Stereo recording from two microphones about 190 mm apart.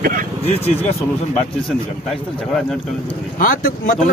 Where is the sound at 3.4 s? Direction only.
45° left (ahead or behind).